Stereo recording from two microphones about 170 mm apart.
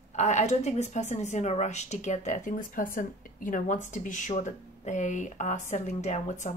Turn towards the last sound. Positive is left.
turn(degrees=45)  # may be behind; listen again after turning